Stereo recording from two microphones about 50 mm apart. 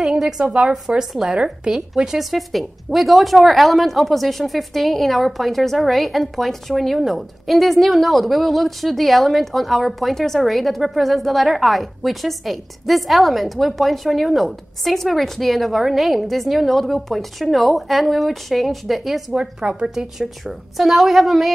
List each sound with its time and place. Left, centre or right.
0.0 s a sound: centre
0.5 s a woman's voice: right
0.8 s a woman's voice: centre
19.7 s a woman's voice: centre